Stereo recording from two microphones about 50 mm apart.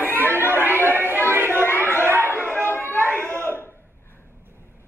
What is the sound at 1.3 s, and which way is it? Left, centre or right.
Chatter, right.